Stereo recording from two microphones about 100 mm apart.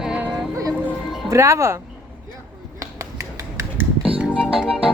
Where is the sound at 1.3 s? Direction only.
30° right (ahead or behind).